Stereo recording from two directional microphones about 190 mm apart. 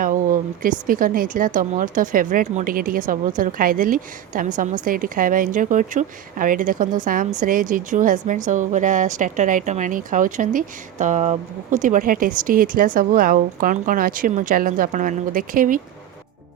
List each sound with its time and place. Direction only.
0.0 s a woman's voice: 45° right (ahead or behind)